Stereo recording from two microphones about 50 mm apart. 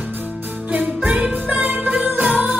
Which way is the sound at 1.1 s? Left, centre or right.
Right.